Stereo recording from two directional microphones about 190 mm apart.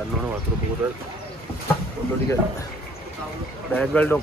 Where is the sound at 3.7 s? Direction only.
10° left (ahead or behind).